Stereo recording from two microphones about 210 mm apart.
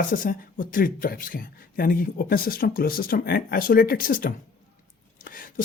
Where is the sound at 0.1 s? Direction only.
40° left (ahead or behind).